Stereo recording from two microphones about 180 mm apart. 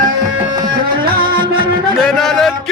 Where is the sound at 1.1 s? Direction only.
55° right (ahead or behind).